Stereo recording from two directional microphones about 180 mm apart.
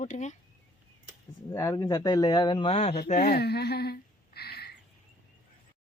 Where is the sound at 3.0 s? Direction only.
55° left (ahead or behind).